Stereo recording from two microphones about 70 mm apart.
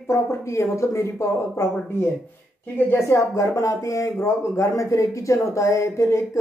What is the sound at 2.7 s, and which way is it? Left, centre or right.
A woman's voice, left.